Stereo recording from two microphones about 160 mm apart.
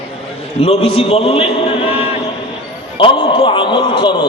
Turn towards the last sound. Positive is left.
turn(degrees=30)  # may be behind; listen again after turning